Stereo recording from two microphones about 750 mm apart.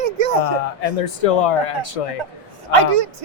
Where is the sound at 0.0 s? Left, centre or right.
Right.